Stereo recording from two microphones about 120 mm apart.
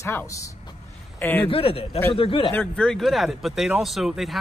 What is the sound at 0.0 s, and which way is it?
Speech, 25° left (ahead or behind).